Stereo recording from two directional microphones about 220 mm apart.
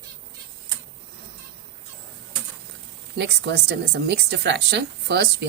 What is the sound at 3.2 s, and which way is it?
A woman's voice, 50° right (ahead or behind).